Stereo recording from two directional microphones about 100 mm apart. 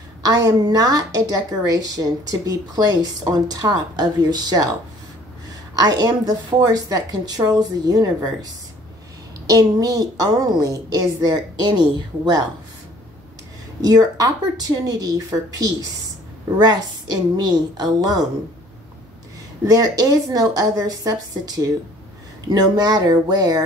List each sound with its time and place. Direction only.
0.2 s a woman's voice: 40° right (ahead or behind)
5.8 s a woman's voice: 40° right (ahead or behind)
9.5 s a woman's voice: 35° right (ahead or behind)
13.7 s a woman's voice: 40° right (ahead or behind)
19.6 s a woman's voice: 40° right (ahead or behind)